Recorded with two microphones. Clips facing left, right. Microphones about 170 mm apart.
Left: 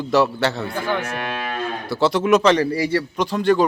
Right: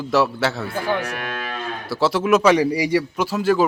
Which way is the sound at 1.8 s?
Centre (ahead or behind).